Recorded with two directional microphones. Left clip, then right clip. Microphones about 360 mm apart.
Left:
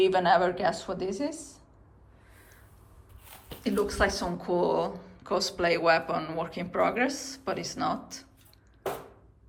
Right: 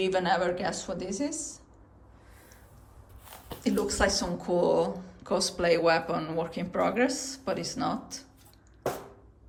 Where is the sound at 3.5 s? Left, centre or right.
Centre.